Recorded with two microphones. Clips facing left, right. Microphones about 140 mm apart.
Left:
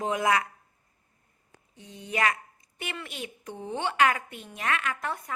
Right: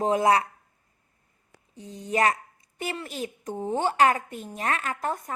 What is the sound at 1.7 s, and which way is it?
Speech, 35° right (ahead or behind).